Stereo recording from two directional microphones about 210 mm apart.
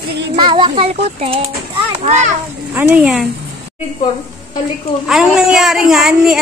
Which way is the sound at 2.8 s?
10° right (ahead or behind).